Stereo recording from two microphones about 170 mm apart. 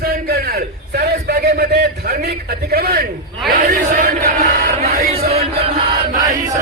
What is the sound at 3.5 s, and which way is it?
Chant, 60° right (ahead or behind).